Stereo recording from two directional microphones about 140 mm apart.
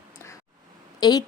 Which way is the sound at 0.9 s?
30° left (ahead or behind).